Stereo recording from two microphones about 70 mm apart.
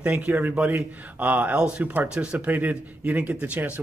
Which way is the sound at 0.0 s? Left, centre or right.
Right.